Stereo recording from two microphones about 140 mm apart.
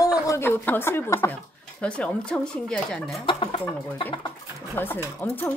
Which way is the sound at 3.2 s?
45° left (ahead or behind).